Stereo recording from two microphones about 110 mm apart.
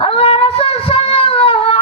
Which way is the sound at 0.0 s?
60° left (ahead or behind).